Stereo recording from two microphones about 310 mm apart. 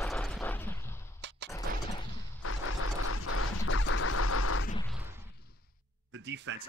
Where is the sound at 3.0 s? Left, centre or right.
Left.